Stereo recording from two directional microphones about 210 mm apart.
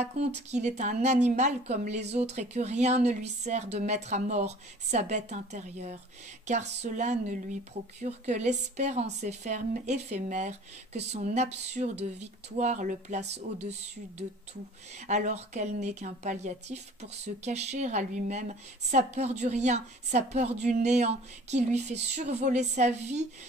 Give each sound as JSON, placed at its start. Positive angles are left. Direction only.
{"t": 0.5, "sound": "speech", "side_deg": -35}
{"t": 15.0, "sound": "speech", "side_deg": -35}